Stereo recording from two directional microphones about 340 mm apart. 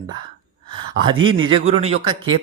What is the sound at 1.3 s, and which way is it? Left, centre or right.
Speech, centre.